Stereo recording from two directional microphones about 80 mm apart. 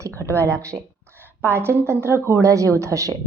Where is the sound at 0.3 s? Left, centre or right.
Right.